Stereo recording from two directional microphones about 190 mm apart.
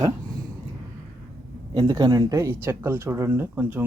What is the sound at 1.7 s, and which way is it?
Speech, 20° right (ahead or behind).